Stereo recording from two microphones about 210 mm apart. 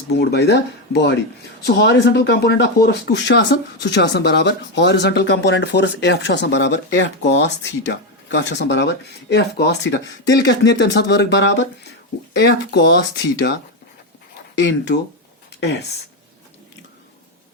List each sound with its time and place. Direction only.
0.2 s speech: 50° left (ahead or behind)